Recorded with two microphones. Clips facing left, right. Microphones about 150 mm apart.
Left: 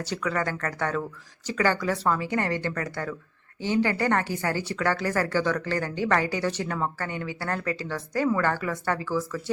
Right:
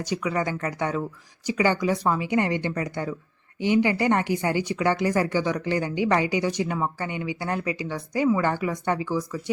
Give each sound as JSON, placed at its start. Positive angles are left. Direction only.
{"t": 0.0, "sound": "speech", "side_deg": -15}